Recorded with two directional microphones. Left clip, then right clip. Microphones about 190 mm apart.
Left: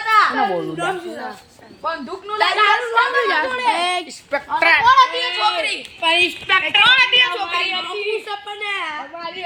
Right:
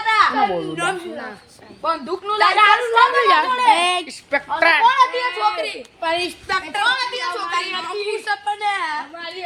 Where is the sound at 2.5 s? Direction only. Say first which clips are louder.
Right 2 dB; 45° right (ahead or behind).